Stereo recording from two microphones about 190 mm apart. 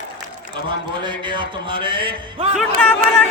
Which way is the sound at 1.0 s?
25° right (ahead or behind).